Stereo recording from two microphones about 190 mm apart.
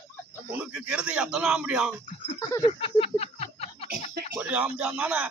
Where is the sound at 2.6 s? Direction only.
30° left (ahead or behind).